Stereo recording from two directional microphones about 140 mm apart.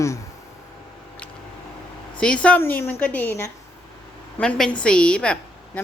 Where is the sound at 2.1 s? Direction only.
5° left (ahead or behind).